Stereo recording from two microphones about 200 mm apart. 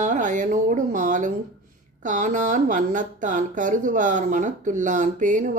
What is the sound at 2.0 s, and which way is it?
A woman's voice, 40° right (ahead or behind).